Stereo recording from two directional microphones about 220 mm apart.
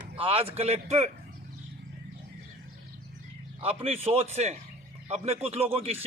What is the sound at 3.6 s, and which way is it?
Speech, 25° right (ahead or behind).